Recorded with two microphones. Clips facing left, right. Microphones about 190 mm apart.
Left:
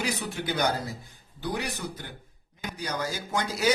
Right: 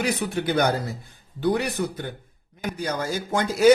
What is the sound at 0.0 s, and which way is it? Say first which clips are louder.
A man's voice: right 6 dB; 55° right (ahead or behind).